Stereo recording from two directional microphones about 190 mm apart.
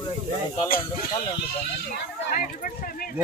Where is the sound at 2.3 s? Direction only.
45° left (ahead or behind).